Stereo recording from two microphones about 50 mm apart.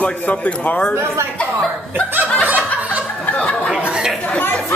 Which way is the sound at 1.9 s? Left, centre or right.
Right.